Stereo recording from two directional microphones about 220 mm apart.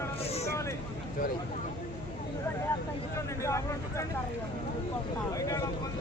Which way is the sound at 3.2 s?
15° left (ahead or behind).